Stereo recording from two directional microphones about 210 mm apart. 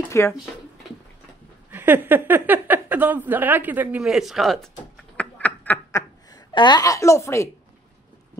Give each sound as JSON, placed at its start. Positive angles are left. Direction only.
{"t": 0.1, "sound": "speech", "side_deg": 15}
{"t": 1.7, "sound": "a woman's voice", "side_deg": -10}